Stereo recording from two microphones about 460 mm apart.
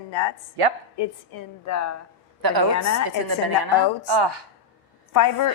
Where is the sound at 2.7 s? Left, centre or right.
Left.